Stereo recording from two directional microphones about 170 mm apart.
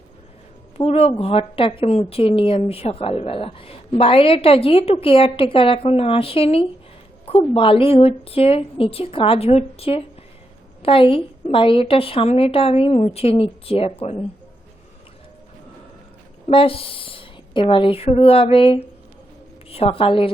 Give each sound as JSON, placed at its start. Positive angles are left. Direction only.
{"t": 0.8, "sound": "a woman's voice", "side_deg": 35}
{"t": 16.5, "sound": "a woman's voice", "side_deg": 30}